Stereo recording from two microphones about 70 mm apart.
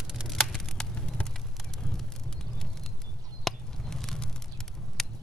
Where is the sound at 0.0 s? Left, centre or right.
Centre.